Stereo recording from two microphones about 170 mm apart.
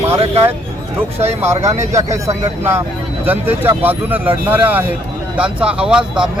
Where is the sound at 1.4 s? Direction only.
15° right (ahead or behind).